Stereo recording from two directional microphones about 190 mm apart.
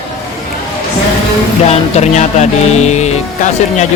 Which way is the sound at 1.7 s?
35° left (ahead or behind).